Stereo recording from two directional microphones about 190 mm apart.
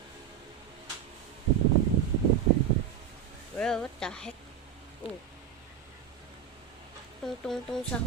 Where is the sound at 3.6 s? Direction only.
5° left (ahead or behind).